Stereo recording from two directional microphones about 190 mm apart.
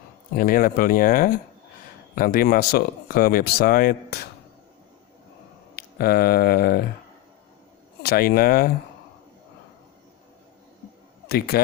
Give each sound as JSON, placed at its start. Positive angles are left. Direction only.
{"t": 0.3, "sound": "speech", "side_deg": 50}
{"t": 5.7, "sound": "speech", "side_deg": 55}
{"t": 8.0, "sound": "speech", "side_deg": 55}
{"t": 11.3, "sound": "speech", "side_deg": 55}